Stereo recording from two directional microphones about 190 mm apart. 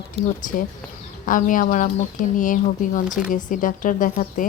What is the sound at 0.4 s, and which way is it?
Speech, 45° left (ahead or behind).